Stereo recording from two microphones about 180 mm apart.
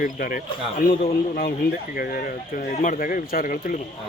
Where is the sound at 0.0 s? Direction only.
50° left (ahead or behind).